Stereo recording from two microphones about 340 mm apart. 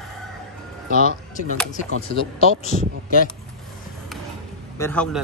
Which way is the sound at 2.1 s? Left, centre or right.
Centre.